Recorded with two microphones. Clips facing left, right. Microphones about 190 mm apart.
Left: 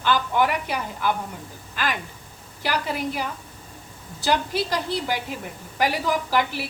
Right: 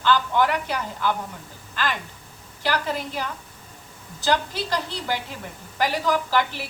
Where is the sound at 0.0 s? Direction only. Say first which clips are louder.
Right 1 dB; 15° left (ahead or behind).